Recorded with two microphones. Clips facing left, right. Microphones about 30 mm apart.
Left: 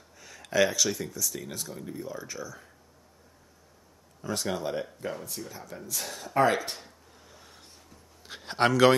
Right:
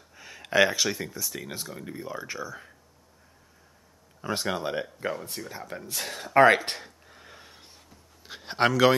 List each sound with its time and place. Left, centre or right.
0.2 s speech: right
4.2 s speech: right
8.3 s speech: centre